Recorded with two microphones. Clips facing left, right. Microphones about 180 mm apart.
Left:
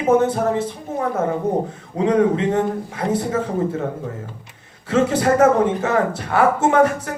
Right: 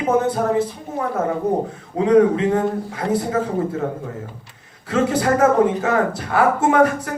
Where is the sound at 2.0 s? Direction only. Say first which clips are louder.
Right 3 dB; 30° left (ahead or behind).